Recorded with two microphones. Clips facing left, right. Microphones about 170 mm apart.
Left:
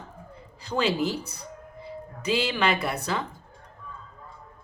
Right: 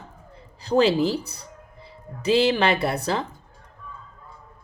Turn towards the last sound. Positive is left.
turn(degrees=-30)  # may be behind; listen again after turning